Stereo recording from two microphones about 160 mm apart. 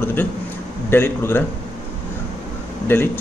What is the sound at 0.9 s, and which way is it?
Speech, 15° left (ahead or behind).